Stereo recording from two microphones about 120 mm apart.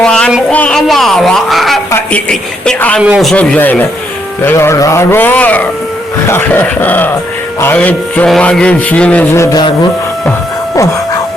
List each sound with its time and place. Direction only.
0.0 s music: 5° left (ahead or behind)
0.5 s a child's voice: 10° left (ahead or behind)
1.9 s speech: 15° left (ahead or behind)
9.3 s a sound: 25° left (ahead or behind)